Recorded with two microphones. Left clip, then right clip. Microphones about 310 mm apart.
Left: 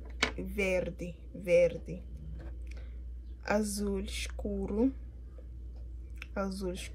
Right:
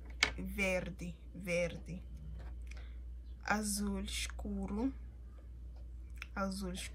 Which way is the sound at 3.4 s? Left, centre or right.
Centre.